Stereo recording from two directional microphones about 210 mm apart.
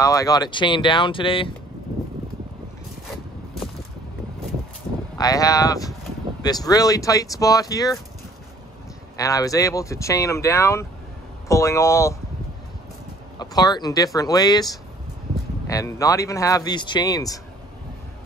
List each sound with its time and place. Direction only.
0.0 s speech: 15° left (ahead or behind)
5.1 s speech: 15° left (ahead or behind)
9.2 s speech: 15° left (ahead or behind)
13.4 s speech: 20° left (ahead or behind)